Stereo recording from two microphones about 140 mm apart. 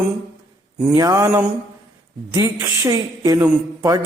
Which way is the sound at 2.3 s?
20° right (ahead or behind).